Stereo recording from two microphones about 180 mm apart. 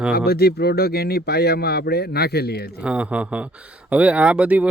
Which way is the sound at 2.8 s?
5° right (ahead or behind).